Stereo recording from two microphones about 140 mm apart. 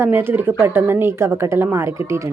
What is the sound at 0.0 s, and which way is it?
Speech, 15° right (ahead or behind).